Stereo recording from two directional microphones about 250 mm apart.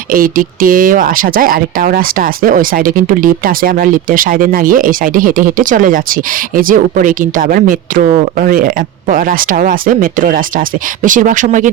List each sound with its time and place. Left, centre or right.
0.1 s speech: right